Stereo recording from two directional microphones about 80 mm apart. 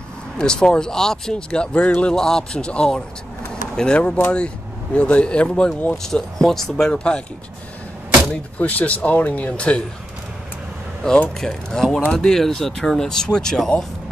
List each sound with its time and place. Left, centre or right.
0.4 s speech: centre
8.5 s speech: centre
11.1 s speech: centre